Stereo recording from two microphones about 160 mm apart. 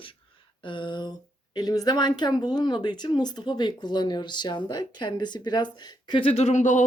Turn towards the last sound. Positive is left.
turn(degrees=50)  # may be behind; listen again after turning